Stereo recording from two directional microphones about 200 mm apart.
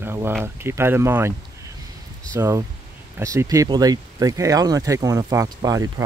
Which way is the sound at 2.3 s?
15° right (ahead or behind).